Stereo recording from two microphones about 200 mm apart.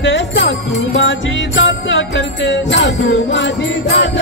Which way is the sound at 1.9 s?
65° left (ahead or behind).